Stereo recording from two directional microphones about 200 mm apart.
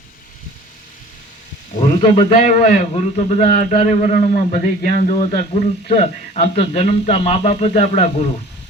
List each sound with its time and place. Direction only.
1.8 s a man's voice: 25° left (ahead or behind)